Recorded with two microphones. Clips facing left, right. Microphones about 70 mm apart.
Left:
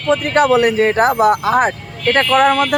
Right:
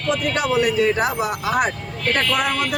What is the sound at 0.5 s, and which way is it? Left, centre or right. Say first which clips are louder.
Speech: left 5 dB; left.